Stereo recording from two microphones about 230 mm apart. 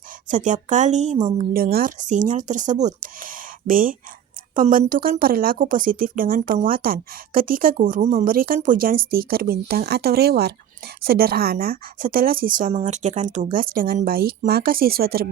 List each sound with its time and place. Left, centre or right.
0.3 s speech: right